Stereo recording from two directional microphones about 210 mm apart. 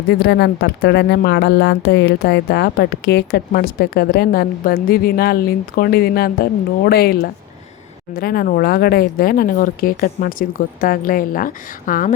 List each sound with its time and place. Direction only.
0.1 s speech: 55° left (ahead or behind)